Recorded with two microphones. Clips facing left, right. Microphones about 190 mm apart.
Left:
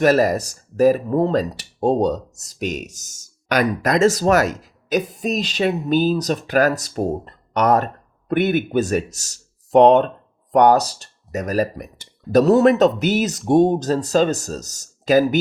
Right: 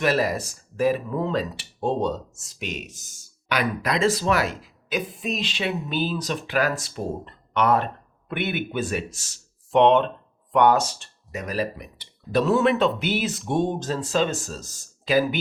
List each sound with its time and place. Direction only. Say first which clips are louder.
0.0 s speech: left 7 dB; 45° left (ahead or behind)